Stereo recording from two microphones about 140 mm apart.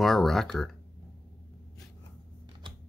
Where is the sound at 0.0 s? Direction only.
Centre (ahead or behind).